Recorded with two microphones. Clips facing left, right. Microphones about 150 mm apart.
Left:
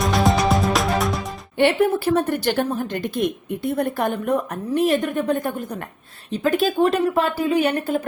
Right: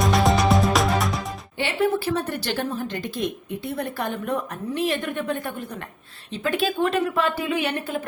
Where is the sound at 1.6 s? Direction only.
55° left (ahead or behind).